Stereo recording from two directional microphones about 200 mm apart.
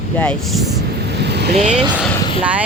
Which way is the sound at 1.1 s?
55° right (ahead or behind).